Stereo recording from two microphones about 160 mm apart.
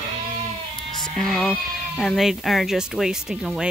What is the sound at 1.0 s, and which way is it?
Speech, centre (ahead or behind).